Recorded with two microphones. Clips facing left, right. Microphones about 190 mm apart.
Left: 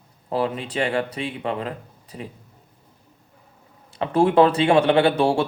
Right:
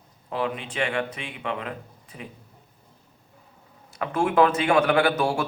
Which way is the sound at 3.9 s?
30° left (ahead or behind).